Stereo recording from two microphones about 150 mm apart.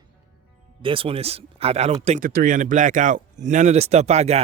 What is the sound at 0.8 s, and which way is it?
Speech, 35° right (ahead or behind).